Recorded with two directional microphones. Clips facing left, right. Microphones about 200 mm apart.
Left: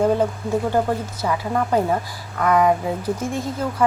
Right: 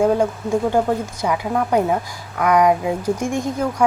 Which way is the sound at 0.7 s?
15° right (ahead or behind).